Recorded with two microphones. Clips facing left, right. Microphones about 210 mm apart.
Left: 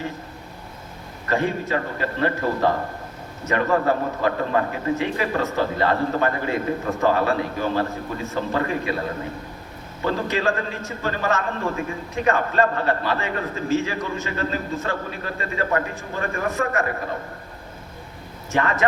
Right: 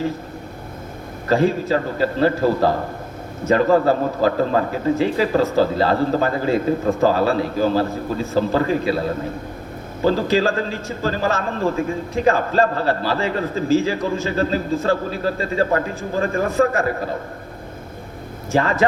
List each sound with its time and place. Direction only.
1.3 s a man's voice: 30° right (ahead or behind)
10.0 s a man's voice: 30° right (ahead or behind)
18.5 s a man's voice: 30° right (ahead or behind)